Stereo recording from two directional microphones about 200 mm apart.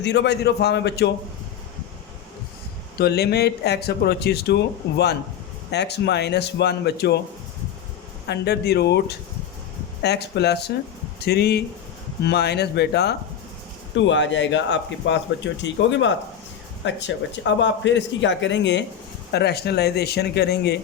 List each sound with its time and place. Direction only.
0.0 s speech: 60° left (ahead or behind)
3.0 s speech: 55° left (ahead or behind)
8.3 s speech: 55° left (ahead or behind)